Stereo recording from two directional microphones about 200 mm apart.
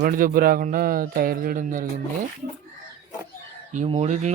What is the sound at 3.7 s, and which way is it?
Speech, 30° right (ahead or behind).